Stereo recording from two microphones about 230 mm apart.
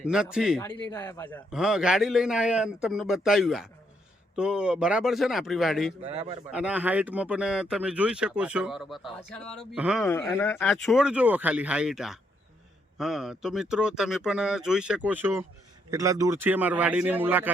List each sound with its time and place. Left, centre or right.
0.0 s speech: centre
0.6 s speech: centre
6.0 s a man's voice: right
6.5 s speech: centre
10.1 s speech: centre